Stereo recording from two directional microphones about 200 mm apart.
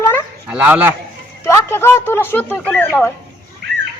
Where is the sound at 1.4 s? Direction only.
15° left (ahead or behind).